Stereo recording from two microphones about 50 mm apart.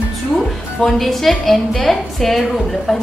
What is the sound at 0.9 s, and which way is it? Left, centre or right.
A woman's voice, centre.